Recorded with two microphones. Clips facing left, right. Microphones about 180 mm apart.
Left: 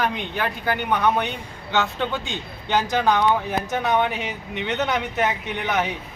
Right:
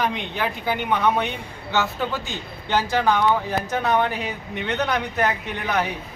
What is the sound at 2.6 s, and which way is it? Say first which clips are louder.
A man's voice: even; 15° left (ahead or behind).